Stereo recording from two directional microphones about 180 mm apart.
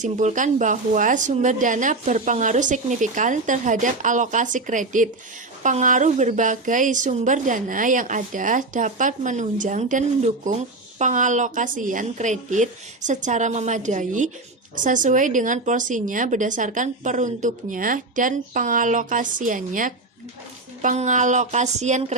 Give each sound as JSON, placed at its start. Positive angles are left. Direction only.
{"t": 0.0, "sound": "a woman's voice", "side_deg": -40}